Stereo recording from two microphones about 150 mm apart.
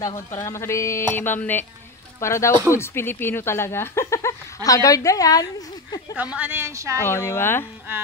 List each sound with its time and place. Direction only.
0.0 s a woman's voice: 20° left (ahead or behind)
6.3 s a woman's voice: 15° right (ahead or behind)
7.0 s speech: 15° left (ahead or behind)